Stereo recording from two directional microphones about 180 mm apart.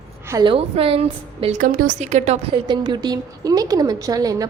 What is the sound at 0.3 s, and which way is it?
A woman's voice, 25° right (ahead or behind).